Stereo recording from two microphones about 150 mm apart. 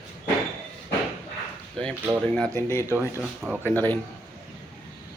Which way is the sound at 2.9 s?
10° right (ahead or behind).